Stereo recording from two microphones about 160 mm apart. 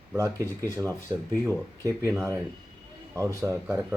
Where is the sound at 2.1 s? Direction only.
15° right (ahead or behind).